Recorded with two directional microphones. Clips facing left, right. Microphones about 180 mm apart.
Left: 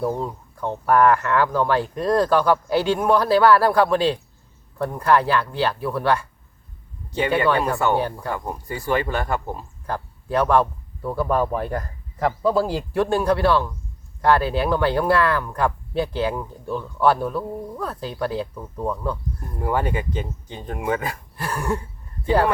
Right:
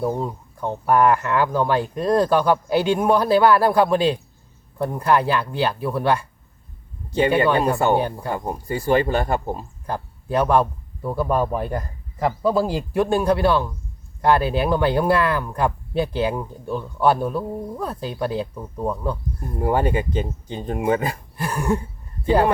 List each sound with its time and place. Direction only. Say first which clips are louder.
0.1 s speech: right 1 dB; 10° right (ahead or behind)
7.3 s speech: right 1 dB; 20° right (ahead or behind)
19.6 s speech: right 3 dB; 30° right (ahead or behind)
21.3 s speech: right 3 dB; 15° right (ahead or behind)